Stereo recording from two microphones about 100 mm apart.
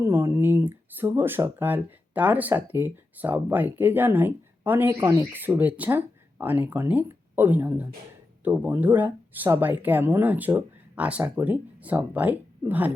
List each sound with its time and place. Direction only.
0.0 s speech: 25° right (ahead or behind)